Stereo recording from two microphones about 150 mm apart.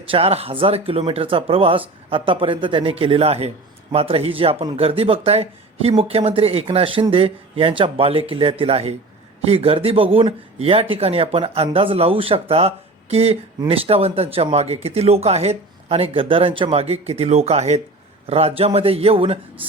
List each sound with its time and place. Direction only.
0.0 s speech: 40° right (ahead or behind)